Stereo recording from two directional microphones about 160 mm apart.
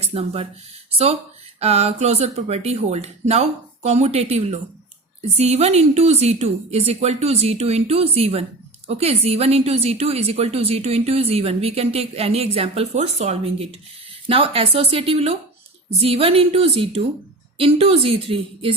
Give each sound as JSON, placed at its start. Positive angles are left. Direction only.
{"t": 0.0, "sound": "speech", "side_deg": -40}
{"t": 1.5, "sound": "a woman's voice", "side_deg": -40}